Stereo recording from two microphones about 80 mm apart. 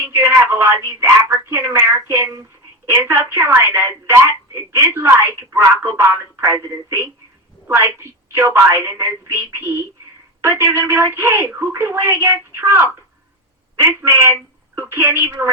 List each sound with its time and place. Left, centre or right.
0.0 s speech: right